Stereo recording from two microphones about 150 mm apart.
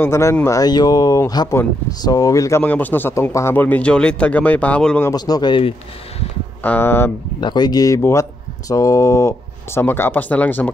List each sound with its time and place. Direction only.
0.0 s speech: 15° left (ahead or behind)
5.1 s speech: 30° left (ahead or behind)
6.6 s speech: 15° left (ahead or behind)
7.3 s speech: 30° left (ahead or behind); by 10.7 s 10° left (ahead or behind)